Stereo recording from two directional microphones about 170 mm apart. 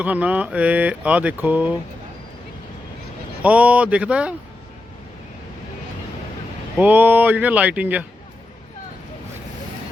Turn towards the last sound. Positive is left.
turn(degrees=-10)  # may be behind; listen again after turning